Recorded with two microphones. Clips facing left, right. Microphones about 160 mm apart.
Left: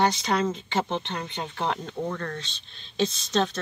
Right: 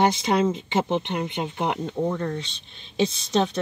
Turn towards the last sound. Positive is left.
turn(degrees=-15)  # may be behind; listen again after turning